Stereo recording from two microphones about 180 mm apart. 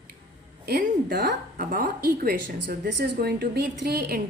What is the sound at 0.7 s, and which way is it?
A woman's voice, 60° right (ahead or behind).